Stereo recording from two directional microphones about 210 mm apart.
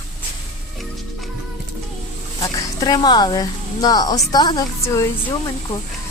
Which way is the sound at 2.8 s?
20° left (ahead or behind).